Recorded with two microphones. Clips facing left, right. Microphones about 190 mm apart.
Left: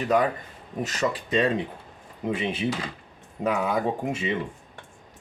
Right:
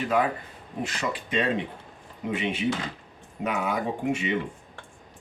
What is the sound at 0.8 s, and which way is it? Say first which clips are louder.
Speech: left 3 dB; 40° left (ahead or behind).